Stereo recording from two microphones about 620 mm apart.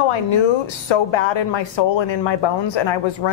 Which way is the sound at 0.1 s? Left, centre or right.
Left.